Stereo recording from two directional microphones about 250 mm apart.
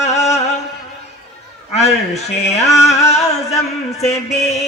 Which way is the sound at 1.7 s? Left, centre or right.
Left.